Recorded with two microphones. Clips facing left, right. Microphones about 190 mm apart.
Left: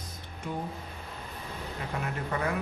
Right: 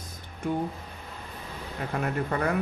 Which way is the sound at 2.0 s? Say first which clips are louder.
Right 5 dB; 55° right (ahead or behind).